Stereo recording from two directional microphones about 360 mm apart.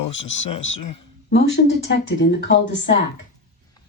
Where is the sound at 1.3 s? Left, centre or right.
Left.